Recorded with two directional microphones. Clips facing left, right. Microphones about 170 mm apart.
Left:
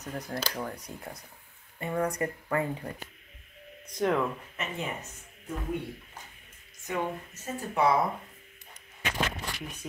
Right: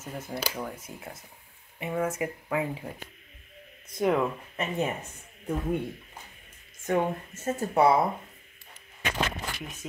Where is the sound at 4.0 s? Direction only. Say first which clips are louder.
Right 2 dB; 10° right (ahead or behind).